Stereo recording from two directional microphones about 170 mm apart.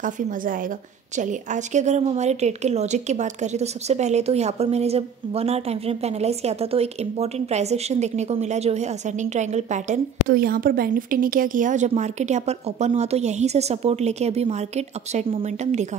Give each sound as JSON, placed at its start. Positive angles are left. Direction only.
{"t": 0.0, "sound": "a woman's voice", "side_deg": -55}